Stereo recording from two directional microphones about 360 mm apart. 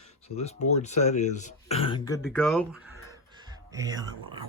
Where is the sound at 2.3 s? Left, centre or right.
Centre.